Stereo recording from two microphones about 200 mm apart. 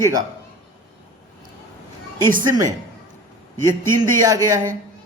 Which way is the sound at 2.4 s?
15° right (ahead or behind).